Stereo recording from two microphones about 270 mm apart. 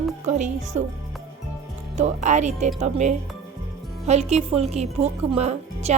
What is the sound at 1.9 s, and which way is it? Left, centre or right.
A woman's voice, right.